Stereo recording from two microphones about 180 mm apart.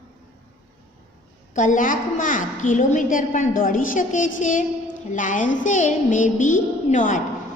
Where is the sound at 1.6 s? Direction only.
45° left (ahead or behind).